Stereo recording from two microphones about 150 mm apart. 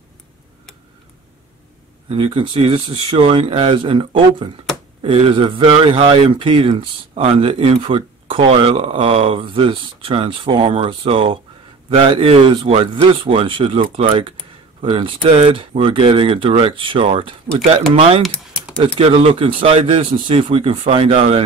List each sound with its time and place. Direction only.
2.0 s a man's voice: 35° right (ahead or behind)
18.2 s typing: centre (ahead or behind)
18.8 s a man's voice: 40° right (ahead or behind)